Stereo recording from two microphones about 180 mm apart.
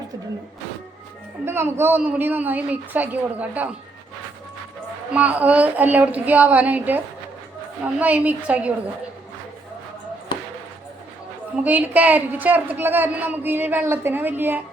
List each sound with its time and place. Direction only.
1.5 s a man's voice: 15° right (ahead or behind)
5.1 s a man's voice: 5° right (ahead or behind)
11.5 s a man's voice: 10° right (ahead or behind)